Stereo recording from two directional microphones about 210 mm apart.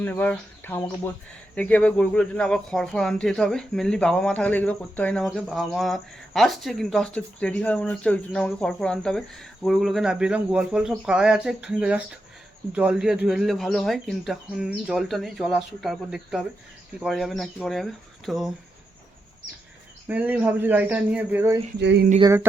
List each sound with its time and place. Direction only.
0.0 s speech: 10° left (ahead or behind)
20.1 s speech: 5° right (ahead or behind)
21.8 s a sound: 55° right (ahead or behind)
22.2 s speech: 15° right (ahead or behind)